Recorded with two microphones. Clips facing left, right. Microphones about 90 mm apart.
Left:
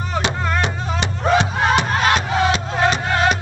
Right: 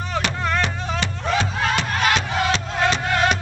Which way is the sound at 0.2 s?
20° left (ahead or behind).